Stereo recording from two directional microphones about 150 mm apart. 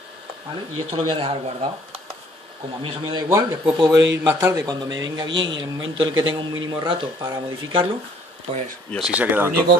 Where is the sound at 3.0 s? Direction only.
25° right (ahead or behind).